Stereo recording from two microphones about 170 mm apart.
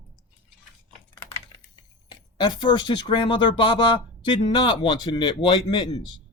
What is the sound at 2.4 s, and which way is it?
A man's voice, 25° left (ahead or behind).